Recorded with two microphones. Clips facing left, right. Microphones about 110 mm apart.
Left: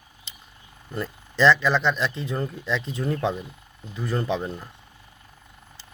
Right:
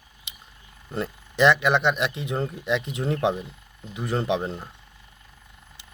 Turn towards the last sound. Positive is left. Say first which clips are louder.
# right 1 dB
turn(degrees=-20)  # may be behind; listen again after turning